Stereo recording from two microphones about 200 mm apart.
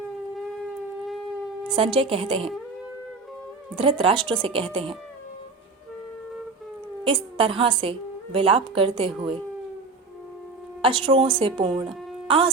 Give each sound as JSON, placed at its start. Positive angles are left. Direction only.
{"t": 1.7, "sound": "a woman's voice", "side_deg": -25}
{"t": 3.8, "sound": "a woman's voice", "side_deg": -25}
{"t": 7.0, "sound": "a woman's voice", "side_deg": -25}
{"t": 10.8, "sound": "a woman's voice", "side_deg": -25}
{"t": 11.9, "sound": "a sound", "side_deg": -25}